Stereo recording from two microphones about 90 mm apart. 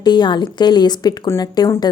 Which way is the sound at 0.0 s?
55° left (ahead or behind).